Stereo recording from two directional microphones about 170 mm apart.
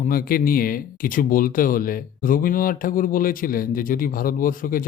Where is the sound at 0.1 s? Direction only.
60° left (ahead or behind).